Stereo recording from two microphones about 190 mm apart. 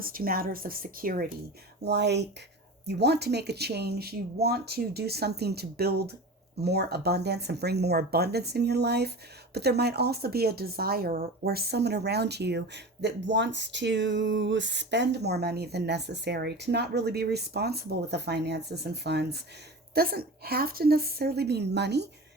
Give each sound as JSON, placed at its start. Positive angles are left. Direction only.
{"t": 0.0, "sound": "a woman's voice", "side_deg": -50}
{"t": 1.8, "sound": "speech", "side_deg": -60}